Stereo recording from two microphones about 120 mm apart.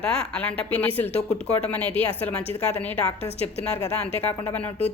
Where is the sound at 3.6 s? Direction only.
20° left (ahead or behind).